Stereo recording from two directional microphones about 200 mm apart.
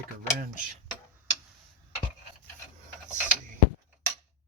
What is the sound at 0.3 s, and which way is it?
Speech, 40° right (ahead or behind).